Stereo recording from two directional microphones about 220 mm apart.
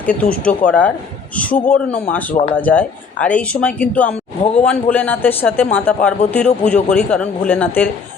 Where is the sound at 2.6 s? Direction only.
5° left (ahead or behind).